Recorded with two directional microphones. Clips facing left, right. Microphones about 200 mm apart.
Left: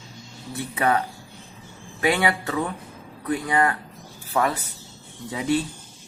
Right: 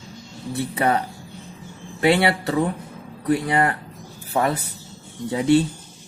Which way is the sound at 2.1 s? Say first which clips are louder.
Right 4 dB; 30° right (ahead or behind).